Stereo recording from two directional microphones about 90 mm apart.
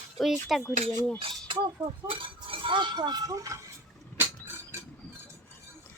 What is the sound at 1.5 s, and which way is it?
Speech, 75° right (ahead or behind).